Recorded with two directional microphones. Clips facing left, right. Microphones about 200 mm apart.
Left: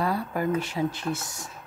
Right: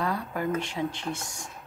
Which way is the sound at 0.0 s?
10° left (ahead or behind).